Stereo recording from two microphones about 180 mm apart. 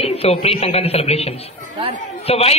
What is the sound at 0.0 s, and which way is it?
A man's voice, 35° left (ahead or behind).